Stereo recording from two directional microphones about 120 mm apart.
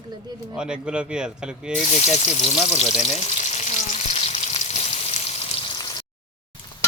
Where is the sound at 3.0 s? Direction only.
65° left (ahead or behind).